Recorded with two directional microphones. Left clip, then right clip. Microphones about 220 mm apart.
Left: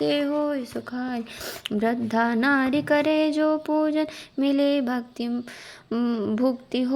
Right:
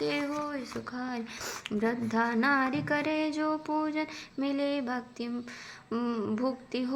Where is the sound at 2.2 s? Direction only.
40° left (ahead or behind).